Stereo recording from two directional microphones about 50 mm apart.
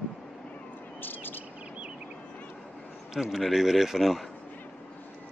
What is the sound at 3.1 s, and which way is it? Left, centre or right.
Speech, centre.